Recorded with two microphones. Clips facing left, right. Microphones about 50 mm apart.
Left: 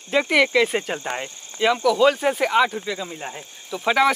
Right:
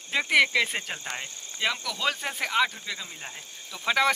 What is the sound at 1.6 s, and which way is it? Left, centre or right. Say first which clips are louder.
Speech: left 12 dB; centre.